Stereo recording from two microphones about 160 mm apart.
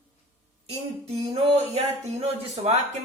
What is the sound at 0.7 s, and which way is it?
Music, 40° right (ahead or behind).